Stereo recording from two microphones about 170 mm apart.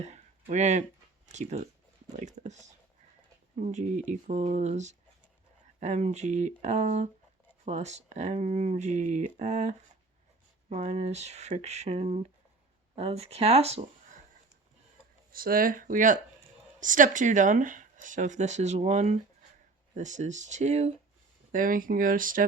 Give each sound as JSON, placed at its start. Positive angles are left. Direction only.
{"t": 0.0, "sound": "a sound", "side_deg": -40}
{"t": 1.3, "sound": "speech", "side_deg": -45}
{"t": 15.3, "sound": "speech", "side_deg": -60}
{"t": 21.5, "sound": "speech", "side_deg": -55}